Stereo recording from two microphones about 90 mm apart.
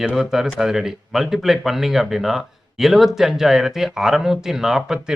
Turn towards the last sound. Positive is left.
turn(degrees=-5)  # may be behind; listen again after turning